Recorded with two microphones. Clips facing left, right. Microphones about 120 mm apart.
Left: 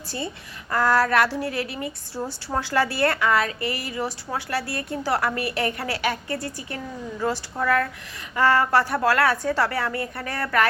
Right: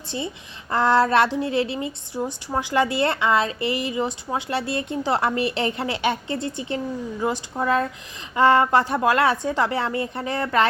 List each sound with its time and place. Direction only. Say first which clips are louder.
0.7 s a woman's voice: right 2 dB; 25° right (ahead or behind)